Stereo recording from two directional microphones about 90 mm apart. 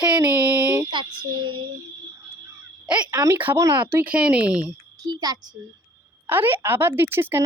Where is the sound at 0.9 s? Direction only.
60° right (ahead or behind).